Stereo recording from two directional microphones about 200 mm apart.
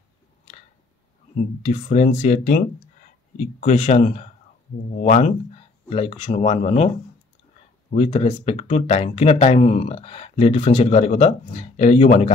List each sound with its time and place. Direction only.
1.6 s speech: 35° left (ahead or behind)
7.9 s speech: 30° left (ahead or behind)